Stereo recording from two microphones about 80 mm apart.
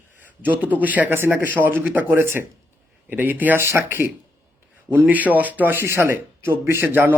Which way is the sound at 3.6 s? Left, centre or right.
Right.